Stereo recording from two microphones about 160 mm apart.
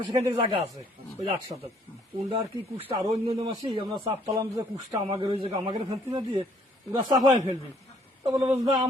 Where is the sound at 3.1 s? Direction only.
35° right (ahead or behind).